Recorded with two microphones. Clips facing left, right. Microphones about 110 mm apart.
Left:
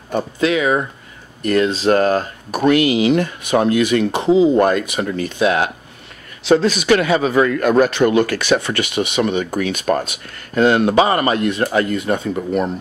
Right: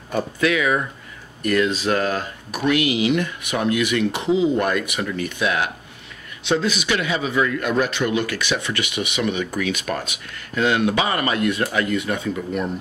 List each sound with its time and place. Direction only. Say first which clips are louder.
0.1 s a man's voice: left 3 dB; 25° left (ahead or behind)
6.4 s a man's voice: left 7 dB; 40° left (ahead or behind)